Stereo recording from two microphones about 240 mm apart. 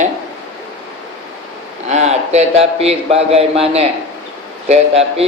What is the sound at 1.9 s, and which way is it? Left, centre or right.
A man's voice, right.